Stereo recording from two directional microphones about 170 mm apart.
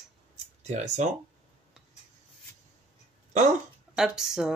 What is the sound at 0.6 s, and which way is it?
Speech, 45° right (ahead or behind).